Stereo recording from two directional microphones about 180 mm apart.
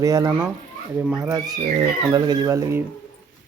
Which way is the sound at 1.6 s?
25° right (ahead or behind).